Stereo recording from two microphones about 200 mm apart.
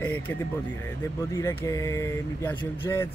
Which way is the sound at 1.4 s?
10° left (ahead or behind).